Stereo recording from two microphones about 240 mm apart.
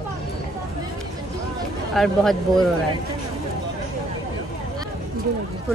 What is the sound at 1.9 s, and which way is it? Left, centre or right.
Speech, centre.